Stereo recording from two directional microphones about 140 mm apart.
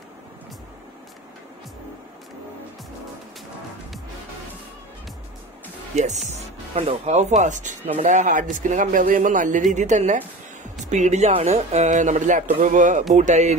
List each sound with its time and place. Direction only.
6.2 s speech: 50° right (ahead or behind)